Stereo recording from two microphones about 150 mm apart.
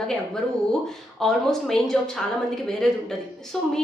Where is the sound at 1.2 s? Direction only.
Centre (ahead or behind).